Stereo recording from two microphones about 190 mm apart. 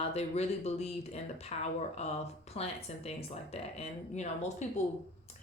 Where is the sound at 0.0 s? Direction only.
35° left (ahead or behind).